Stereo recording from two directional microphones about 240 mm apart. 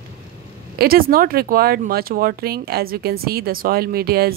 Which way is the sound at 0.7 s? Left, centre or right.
Right.